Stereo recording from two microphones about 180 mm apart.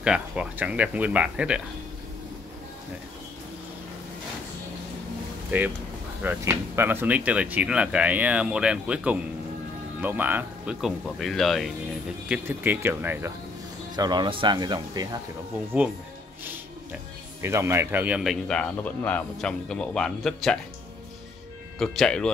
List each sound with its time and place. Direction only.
0.0 s speech: 5° right (ahead or behind)
6.2 s a man's voice: 10° right (ahead or behind)
12.3 s speech: 10° right (ahead or behind)
13.9 s speech: 25° right (ahead or behind)
17.4 s a man's voice: 15° right (ahead or behind); by 20.5 s 5° left (ahead or behind)
21.7 s a man's voice: 5° left (ahead or behind)